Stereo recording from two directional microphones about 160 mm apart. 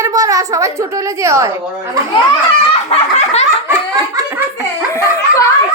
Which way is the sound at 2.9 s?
45° left (ahead or behind).